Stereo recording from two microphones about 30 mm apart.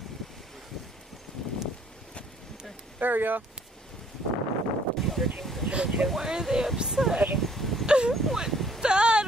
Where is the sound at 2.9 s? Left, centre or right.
Right.